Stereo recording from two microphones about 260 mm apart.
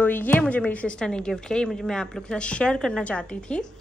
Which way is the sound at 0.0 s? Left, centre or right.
Centre.